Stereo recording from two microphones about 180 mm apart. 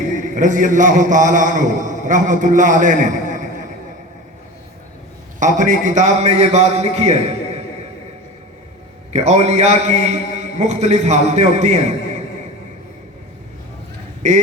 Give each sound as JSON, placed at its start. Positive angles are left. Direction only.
{"t": 0.1, "sound": "a man's voice", "side_deg": -45}
{"t": 5.4, "sound": "a man's voice", "side_deg": -45}
{"t": 9.1, "sound": "a man's voice", "side_deg": -35}
{"t": 14.2, "sound": "a man's voice", "side_deg": -40}